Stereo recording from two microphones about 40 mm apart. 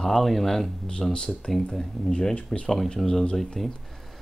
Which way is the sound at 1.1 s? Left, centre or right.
Left.